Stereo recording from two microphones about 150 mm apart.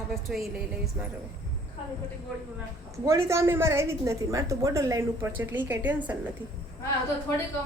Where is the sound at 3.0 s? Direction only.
20° right (ahead or behind).